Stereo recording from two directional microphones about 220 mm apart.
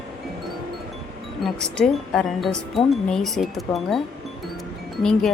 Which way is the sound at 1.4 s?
Centre (ahead or behind).